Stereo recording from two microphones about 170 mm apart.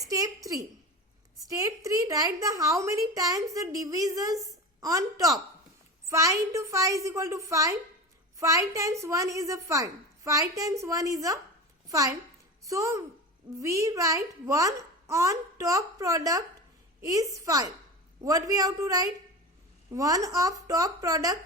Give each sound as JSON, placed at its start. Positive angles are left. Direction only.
{"t": 0.0, "sound": "a woman's voice", "side_deg": -20}
{"t": 1.5, "sound": "a woman's voice", "side_deg": -20}